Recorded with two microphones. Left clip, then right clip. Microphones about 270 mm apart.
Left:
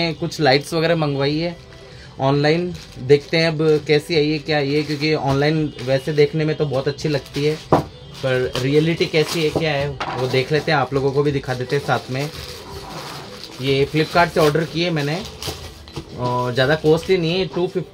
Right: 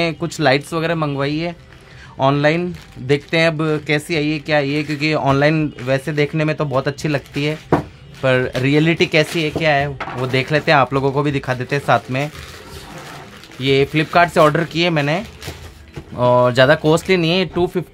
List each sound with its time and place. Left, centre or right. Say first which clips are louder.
0.0 s speech: right 1 dB; centre
13.6 s speech: right 3 dB; right
16.2 s speech: right 8 dB; right